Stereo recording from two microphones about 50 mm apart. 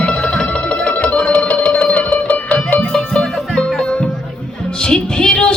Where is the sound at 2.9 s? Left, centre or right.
Centre.